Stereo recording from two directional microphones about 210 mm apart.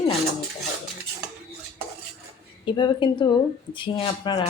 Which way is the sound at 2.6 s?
20° left (ahead or behind).